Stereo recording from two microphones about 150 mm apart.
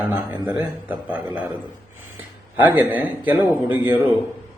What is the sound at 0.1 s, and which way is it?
A man's voice, 10° right (ahead or behind).